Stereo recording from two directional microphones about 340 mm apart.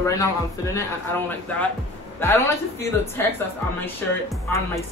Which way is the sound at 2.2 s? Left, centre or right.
Centre.